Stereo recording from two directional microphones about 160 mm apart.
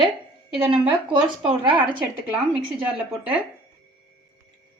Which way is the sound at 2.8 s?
10° right (ahead or behind).